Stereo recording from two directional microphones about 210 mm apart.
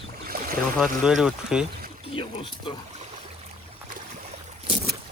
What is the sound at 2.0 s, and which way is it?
Speech, 25° left (ahead or behind).